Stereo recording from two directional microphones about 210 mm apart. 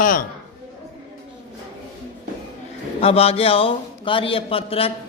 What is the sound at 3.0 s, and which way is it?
Speech, 30° left (ahead or behind).